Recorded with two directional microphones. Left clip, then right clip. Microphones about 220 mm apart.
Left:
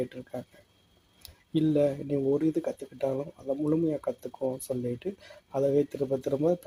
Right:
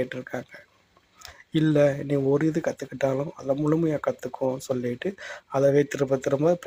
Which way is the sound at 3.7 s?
5° right (ahead or behind).